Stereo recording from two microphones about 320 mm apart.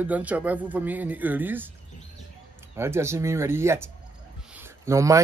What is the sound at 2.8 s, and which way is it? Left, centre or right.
Speech, centre.